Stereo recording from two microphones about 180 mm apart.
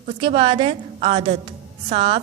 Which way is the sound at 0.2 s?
30° right (ahead or behind).